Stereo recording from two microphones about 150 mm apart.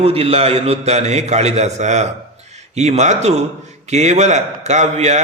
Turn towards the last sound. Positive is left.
turn(degrees=-50)  # may be behind; listen again after turning